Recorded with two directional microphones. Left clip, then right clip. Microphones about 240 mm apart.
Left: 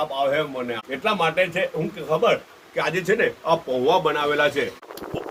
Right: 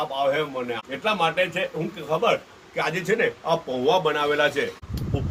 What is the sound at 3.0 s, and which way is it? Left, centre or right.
Speech, centre.